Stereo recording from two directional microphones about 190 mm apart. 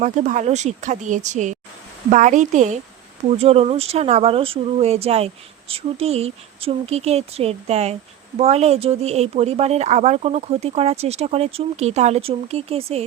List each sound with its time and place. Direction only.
0.0 s speech: 40° right (ahead or behind)